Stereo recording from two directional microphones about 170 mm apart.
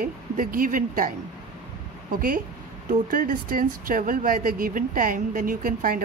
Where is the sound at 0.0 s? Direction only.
55° right (ahead or behind).